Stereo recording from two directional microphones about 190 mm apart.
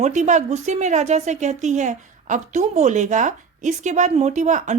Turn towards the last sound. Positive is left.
turn(degrees=-40)  # may be behind; listen again after turning